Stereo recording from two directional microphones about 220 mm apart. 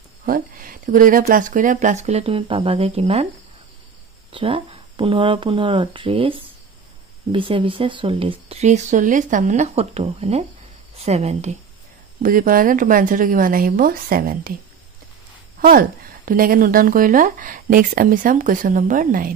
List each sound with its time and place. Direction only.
0.2 s speech: 40° right (ahead or behind)
4.3 s speech: 25° right (ahead or behind); by 14.5 s 40° right (ahead or behind)
15.6 s speech: 40° right (ahead or behind)